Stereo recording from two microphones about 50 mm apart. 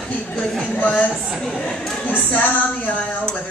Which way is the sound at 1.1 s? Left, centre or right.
Centre.